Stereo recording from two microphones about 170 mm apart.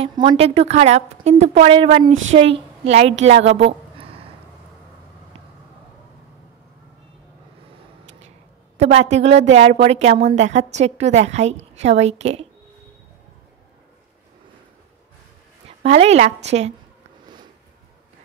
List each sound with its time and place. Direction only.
0.0 s a woman's voice: 25° right (ahead or behind)
3.5 s a sound: 35° right (ahead or behind)
8.7 s a woman's voice: 40° right (ahead or behind)
15.8 s a woman's voice: 40° right (ahead or behind)